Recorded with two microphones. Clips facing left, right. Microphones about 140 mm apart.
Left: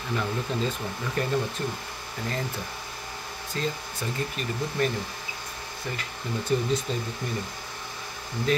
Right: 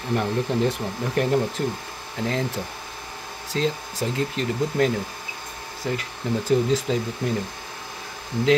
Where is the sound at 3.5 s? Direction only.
90° right.